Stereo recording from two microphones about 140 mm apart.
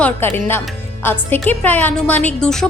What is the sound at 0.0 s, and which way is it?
A woman's voice, 15° left (ahead or behind).